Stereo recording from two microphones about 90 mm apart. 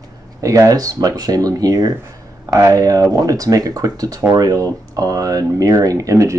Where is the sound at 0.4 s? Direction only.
40° right (ahead or behind).